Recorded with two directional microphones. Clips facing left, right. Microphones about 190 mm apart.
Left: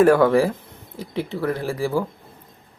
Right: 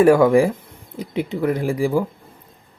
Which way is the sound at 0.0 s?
10° right (ahead or behind).